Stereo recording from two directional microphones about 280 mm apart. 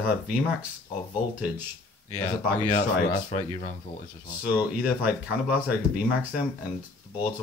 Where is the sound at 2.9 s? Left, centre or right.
Left.